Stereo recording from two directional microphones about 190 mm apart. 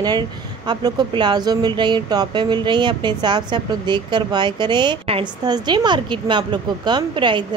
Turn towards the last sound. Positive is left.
turn(degrees=-25)  # may be behind; listen again after turning